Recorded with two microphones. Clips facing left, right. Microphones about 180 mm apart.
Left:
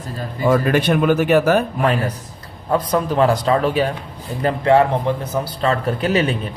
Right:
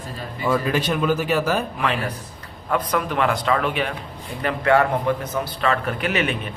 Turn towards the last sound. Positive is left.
turn(degrees=35)  # may be behind; listen again after turning